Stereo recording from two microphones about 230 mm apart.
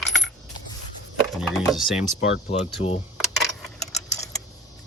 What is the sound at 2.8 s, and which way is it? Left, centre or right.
Speech, left.